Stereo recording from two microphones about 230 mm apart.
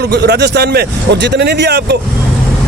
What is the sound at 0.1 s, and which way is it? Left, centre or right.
Speech, right.